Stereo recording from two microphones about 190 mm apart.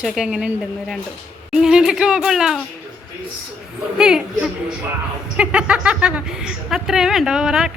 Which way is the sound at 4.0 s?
5° right (ahead or behind).